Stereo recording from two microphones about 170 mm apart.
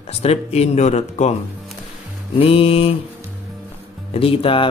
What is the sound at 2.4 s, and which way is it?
Speech, 35° left (ahead or behind).